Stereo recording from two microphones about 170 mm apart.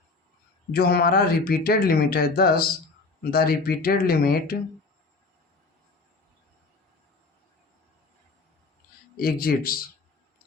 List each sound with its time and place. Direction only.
0.7 s speech: 65° left (ahead or behind)
9.1 s speech: 60° left (ahead or behind)